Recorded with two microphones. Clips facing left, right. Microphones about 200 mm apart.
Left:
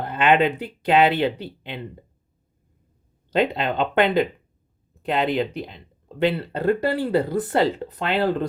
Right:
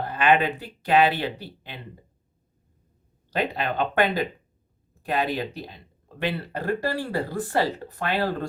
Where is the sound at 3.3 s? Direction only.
20° left (ahead or behind).